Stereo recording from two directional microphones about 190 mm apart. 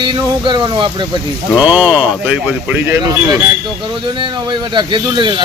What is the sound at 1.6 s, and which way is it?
A man's voice, 5° right (ahead or behind).